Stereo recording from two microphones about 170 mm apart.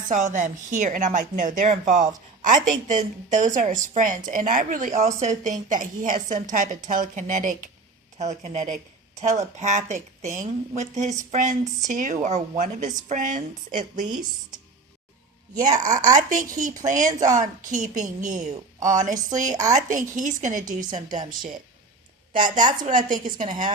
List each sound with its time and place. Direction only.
0.1 s speech: 50° right (ahead or behind)
15.9 s speech: 45° right (ahead or behind)
17.1 s speech: 20° right (ahead or behind)
17.3 s speech: 45° right (ahead or behind)
22.3 s a woman's voice: 30° right (ahead or behind)
22.9 s speech: 50° right (ahead or behind)